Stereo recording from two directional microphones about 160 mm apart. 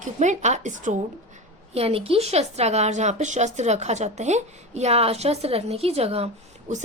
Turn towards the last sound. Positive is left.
turn(degrees=-45)  # may be behind; listen again after turning